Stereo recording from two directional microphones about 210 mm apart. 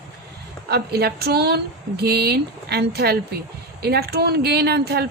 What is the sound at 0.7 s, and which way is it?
Speech, 50° right (ahead or behind).